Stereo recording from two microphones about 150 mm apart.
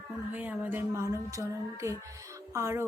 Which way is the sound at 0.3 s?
10° right (ahead or behind).